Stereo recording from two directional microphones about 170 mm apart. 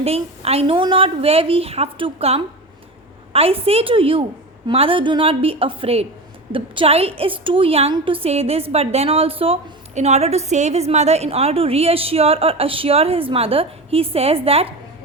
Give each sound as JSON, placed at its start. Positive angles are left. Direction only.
{"t": 0.0, "sound": "a woman's voice", "side_deg": -35}